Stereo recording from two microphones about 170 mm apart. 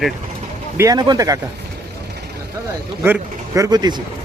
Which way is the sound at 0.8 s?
20° right (ahead or behind).